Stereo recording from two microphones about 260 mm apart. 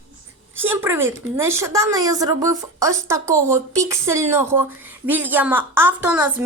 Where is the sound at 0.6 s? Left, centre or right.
Centre.